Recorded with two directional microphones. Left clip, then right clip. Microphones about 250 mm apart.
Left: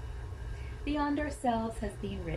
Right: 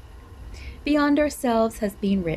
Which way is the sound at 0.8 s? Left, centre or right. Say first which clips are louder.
Right 12 dB; right.